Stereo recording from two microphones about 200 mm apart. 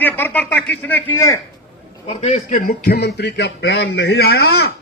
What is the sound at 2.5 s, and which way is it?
A man's voice, 45° left (ahead or behind).